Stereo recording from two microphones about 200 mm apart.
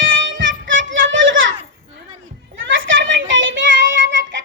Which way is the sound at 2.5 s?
70° right (ahead or behind).